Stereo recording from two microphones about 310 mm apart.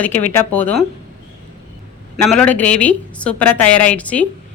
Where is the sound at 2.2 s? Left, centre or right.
Centre.